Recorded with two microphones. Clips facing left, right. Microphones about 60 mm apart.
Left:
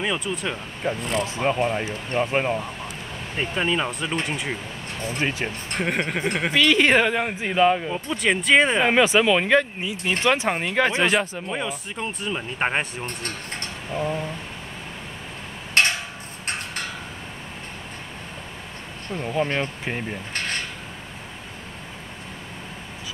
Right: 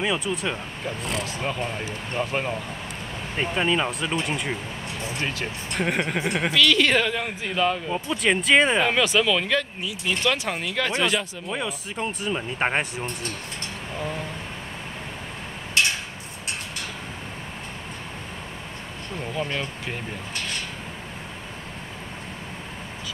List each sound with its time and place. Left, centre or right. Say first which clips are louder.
0.0 s speech: right 1 dB; centre
0.8 s speech: left 5 dB; left
3.3 s speech: right 1 dB; centre
5.8 s speech: even; centre
6.5 s speech: left 2 dB; left
7.9 s speech: even; centre
8.8 s speech: left 3 dB; left
11.4 s speech: left 1 dB; centre
13.9 s speech: left 5 dB; centre
15.8 s a sound: left 3 dB; left
19.3 s speech: left 5 dB; left
20.3 s a sound: left 4 dB; left